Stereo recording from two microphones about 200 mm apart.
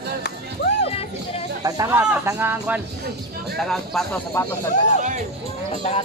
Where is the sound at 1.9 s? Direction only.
5° right (ahead or behind).